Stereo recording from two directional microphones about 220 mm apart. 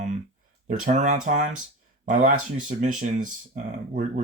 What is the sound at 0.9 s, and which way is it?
Speech, 30° right (ahead or behind).